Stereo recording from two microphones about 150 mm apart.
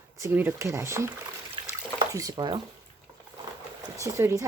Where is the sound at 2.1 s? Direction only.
25° right (ahead or behind).